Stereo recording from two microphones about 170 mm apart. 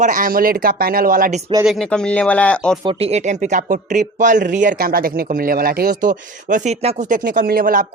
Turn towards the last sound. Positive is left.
turn(degrees=-55)  # may be behind; listen again after turning